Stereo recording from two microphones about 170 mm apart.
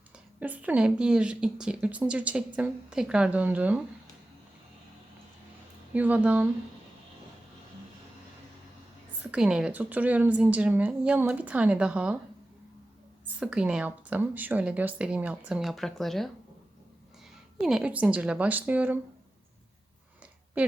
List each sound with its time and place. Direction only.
0.3 s speech: 10° right (ahead or behind)
5.9 s speech: 10° right (ahead or behind)
9.3 s speech: 5° right (ahead or behind)
13.4 s speech: 5° right (ahead or behind)
17.6 s speech: 5° right (ahead or behind)
20.6 s a woman's voice: 10° right (ahead or behind)